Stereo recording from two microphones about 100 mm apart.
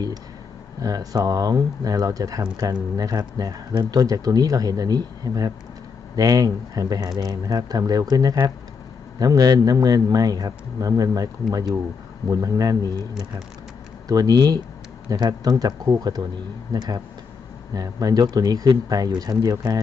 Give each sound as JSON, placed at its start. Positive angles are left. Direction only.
{"t": 0.8, "sound": "speech", "side_deg": -35}
{"t": 14.1, "sound": "speech", "side_deg": -40}